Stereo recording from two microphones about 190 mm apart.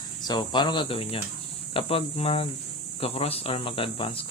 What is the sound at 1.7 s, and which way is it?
Cricket, 30° left (ahead or behind).